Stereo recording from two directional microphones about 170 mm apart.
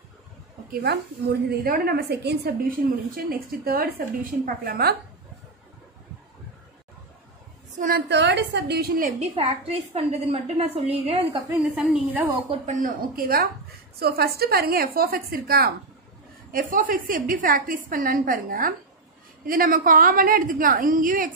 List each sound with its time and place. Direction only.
0.7 s a woman's voice: 70° right (ahead or behind)
8.1 s a woman's voice: 90° right; by 9.1 s 65° right (ahead or behind)
9.2 s a woman's voice: 35° right (ahead or behind)
11.6 s a woman's voice: 5° right (ahead or behind)
12.4 s a woman's voice: 50° right (ahead or behind)